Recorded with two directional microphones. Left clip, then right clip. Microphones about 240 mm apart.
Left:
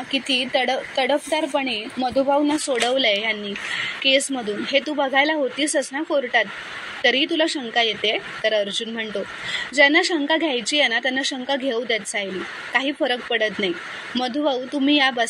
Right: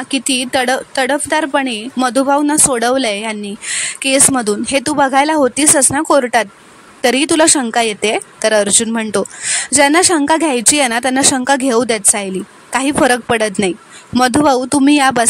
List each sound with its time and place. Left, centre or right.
0.1 s a woman's voice: right